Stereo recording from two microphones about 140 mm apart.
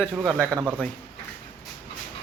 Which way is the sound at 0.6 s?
10° right (ahead or behind).